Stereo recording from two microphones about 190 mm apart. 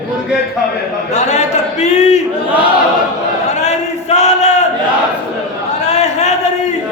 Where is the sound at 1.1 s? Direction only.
35° left (ahead or behind).